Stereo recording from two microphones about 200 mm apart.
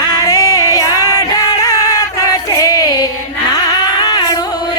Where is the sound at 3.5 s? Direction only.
20° left (ahead or behind).